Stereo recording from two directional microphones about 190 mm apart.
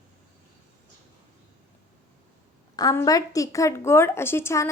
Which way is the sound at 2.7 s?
20° left (ahead or behind).